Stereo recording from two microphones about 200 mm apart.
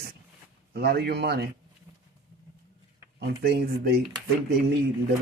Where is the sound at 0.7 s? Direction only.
50° right (ahead or behind).